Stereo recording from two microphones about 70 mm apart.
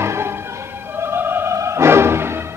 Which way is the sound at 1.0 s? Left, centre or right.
Right.